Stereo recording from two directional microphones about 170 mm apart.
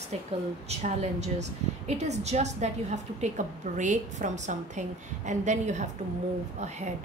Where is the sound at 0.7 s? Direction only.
40° right (ahead or behind).